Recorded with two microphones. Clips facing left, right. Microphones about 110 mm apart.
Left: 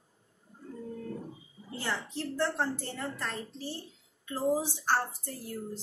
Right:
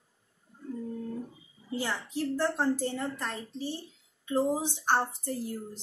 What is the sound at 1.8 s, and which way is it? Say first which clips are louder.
A woman's voice: right 3 dB; 15° right (ahead or behind).